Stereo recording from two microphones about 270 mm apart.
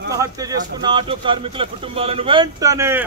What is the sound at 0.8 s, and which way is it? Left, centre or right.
A man's voice, centre.